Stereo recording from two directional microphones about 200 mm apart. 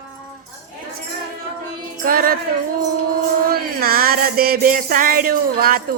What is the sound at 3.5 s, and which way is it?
Music, 50° right (ahead or behind).